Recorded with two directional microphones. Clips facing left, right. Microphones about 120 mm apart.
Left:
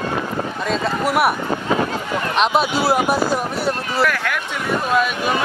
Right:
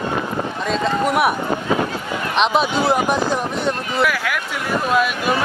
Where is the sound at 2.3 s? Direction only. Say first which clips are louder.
Right 1 dB; 5° left (ahead or behind).